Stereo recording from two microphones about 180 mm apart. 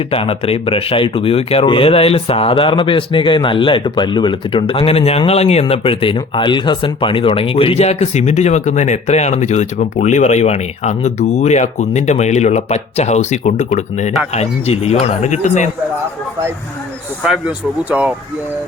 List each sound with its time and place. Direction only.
0.1 s speech: 30° left (ahead or behind)
17.2 s speech: 5° right (ahead or behind)